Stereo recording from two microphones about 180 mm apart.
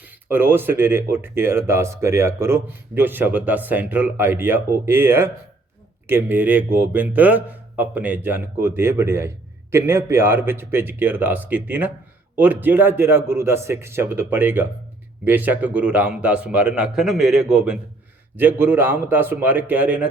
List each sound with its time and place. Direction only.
0.0 s speech: 10° right (ahead or behind)